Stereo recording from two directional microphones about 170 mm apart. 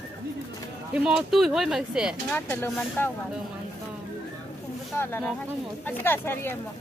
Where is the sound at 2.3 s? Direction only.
10° left (ahead or behind).